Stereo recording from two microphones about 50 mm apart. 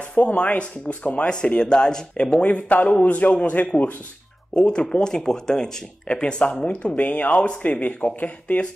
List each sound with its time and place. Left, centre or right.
0.1 s speech: left